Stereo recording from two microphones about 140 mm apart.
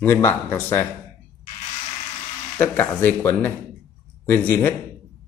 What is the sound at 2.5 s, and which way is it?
Speech, 10° left (ahead or behind).